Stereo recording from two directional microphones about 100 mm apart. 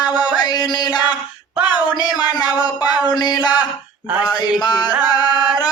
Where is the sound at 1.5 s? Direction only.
15° right (ahead or behind).